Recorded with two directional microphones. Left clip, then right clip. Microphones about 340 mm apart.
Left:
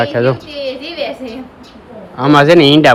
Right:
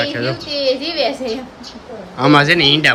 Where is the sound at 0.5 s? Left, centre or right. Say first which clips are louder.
Right 3 dB; right.